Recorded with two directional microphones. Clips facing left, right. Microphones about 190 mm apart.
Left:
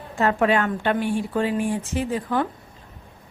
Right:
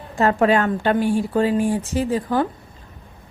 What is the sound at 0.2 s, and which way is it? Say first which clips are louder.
Speech: right 3 dB; 35° right (ahead or behind).